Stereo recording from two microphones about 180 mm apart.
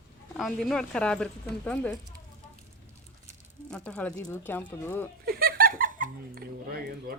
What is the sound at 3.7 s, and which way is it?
Speech, 5° left (ahead or behind).